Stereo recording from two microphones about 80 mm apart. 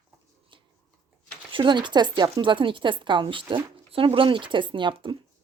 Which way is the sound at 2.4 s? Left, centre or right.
Right.